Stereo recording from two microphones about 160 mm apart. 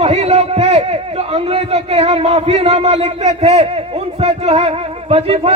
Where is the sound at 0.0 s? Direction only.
40° right (ahead or behind).